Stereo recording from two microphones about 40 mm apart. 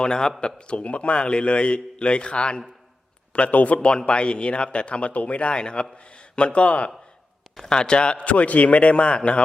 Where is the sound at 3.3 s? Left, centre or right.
Left.